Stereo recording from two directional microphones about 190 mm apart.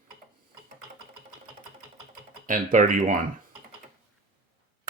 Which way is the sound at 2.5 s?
45° right (ahead or behind).